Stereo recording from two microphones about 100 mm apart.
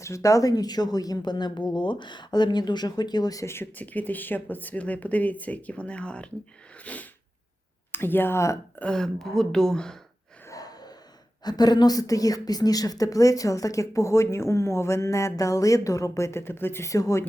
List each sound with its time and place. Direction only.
0.0 s a woman's voice: 30° left (ahead or behind); by 6.3 s 10° left (ahead or behind)
6.7 s sneeze: 15° left (ahead or behind)
7.9 s speech: 20° left (ahead or behind)
8.8 s speech: 5° left (ahead or behind)
10.4 s gasp: 35° left (ahead or behind)
11.4 s a woman's voice: 45° left (ahead or behind)